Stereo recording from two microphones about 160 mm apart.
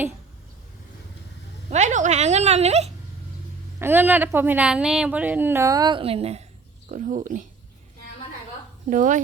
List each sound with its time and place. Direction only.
1.7 s a sound: 50° right (ahead or behind)
3.8 s a woman's voice: 15° right (ahead or behind); by 6.4 s 40° right (ahead or behind)
6.9 s speech: 55° right (ahead or behind)
8.9 s speech: 55° right (ahead or behind)